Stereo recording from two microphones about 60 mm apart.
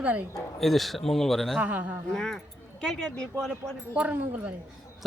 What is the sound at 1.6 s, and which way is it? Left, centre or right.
Speech, right.